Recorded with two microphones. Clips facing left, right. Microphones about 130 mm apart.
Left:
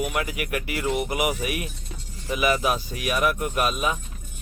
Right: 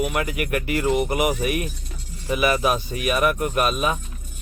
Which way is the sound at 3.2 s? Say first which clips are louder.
Right 2 dB; centre (ahead or behind).